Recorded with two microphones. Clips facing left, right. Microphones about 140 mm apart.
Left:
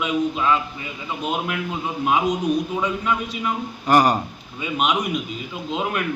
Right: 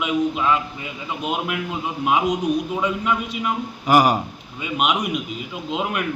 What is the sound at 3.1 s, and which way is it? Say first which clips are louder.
A man's voice: right 1 dB; 5° right (ahead or behind).